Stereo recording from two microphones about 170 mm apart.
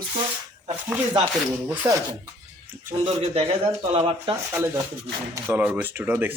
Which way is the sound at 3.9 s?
35° right (ahead or behind).